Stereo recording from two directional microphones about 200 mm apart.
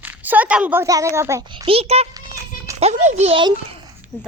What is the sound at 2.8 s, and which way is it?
Speech, 35° right (ahead or behind).